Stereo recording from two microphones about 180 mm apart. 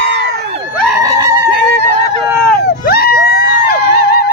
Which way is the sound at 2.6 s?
60° left (ahead or behind).